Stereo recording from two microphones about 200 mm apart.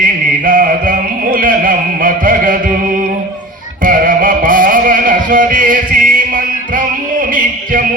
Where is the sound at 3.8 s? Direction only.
45° right (ahead or behind).